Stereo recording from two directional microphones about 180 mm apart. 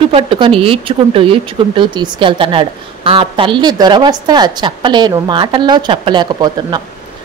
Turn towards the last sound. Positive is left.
turn(degrees=-25)  # may be behind; listen again after turning